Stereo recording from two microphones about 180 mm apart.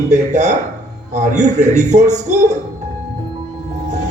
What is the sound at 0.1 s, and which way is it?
A man's voice, 40° right (ahead or behind).